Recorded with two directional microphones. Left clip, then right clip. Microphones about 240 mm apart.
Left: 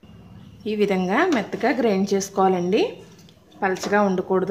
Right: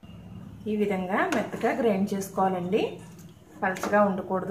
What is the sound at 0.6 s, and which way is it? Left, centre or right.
Speech, left.